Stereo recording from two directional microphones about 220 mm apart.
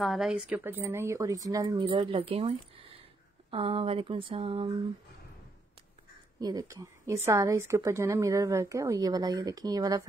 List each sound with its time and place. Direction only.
0.0 s a woman's voice: centre (ahead or behind); by 4.7 s 25° right (ahead or behind)
6.4 s a woman's voice: 15° right (ahead or behind)